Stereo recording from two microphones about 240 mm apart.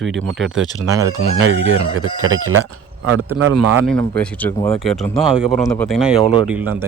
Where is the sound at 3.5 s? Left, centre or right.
Right.